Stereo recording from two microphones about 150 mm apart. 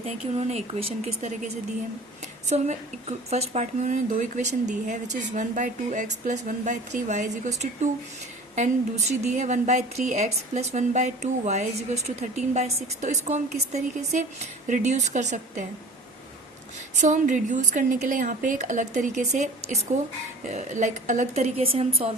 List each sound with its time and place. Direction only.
0.3 s a woman's voice: 45° right (ahead or behind)
2.5 s a woman's voice: 50° right (ahead or behind)
17.0 s a woman's voice: 55° right (ahead or behind)